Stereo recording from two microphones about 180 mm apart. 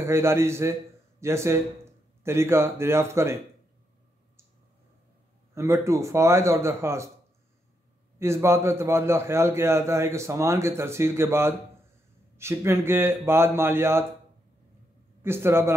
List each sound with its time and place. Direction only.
0.0 s a man's voice: 15° right (ahead or behind)
5.5 s a man's voice: 15° right (ahead or behind)
8.2 s a man's voice: 15° right (ahead or behind)
15.2 s a man's voice: 15° right (ahead or behind)